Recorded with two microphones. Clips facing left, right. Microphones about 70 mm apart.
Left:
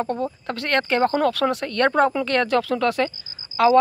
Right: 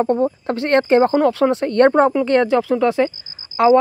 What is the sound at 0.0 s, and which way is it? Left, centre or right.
Speech, right.